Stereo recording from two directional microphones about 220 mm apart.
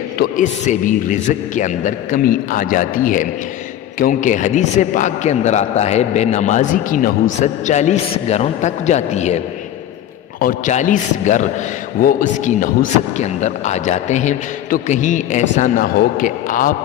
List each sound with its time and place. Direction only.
0.2 s a man's voice: 35° left (ahead or behind)
10.4 s a man's voice: 35° left (ahead or behind)